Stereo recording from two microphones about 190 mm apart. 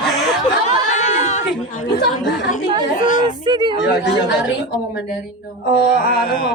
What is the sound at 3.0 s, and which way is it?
Yodeling, 40° left (ahead or behind).